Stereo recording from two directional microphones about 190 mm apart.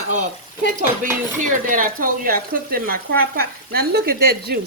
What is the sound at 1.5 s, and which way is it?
Speech, 45° right (ahead or behind).